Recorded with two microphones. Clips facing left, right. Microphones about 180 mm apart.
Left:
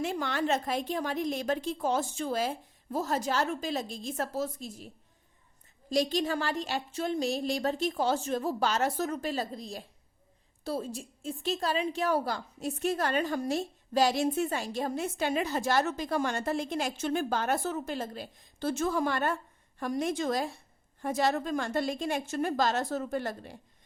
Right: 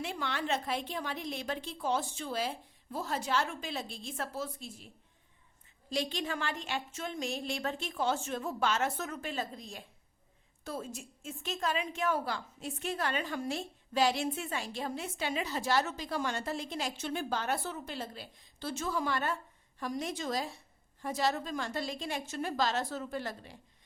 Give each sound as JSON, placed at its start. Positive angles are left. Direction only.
{"t": 0.0, "sound": "a woman's voice", "side_deg": 45}
{"t": 5.9, "sound": "a woman's voice", "side_deg": 40}